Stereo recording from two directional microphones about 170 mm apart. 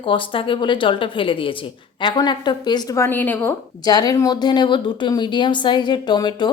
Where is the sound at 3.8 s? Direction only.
20° left (ahead or behind).